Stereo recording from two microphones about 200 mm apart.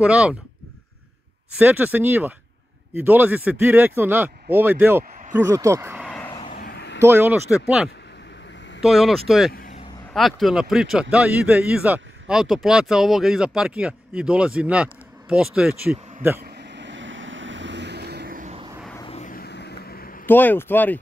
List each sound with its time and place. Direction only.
0.0 s speech: 5° right (ahead or behind)
1.6 s speech: 10° right (ahead or behind)
6.0 s vehicle: 5° left (ahead or behind)
6.5 s vehicle: 50° left (ahead or behind)
7.0 s speech: 10° right (ahead or behind)
9.5 s vehicle: 45° left (ahead or behind)
10.1 s speech: centre (ahead or behind)
16.3 s vehicle: 55° right (ahead or behind)
19.0 s vehicle: 30° left (ahead or behind)
19.3 s a sound: 55° left (ahead or behind)
20.2 s speech: 10° left (ahead or behind)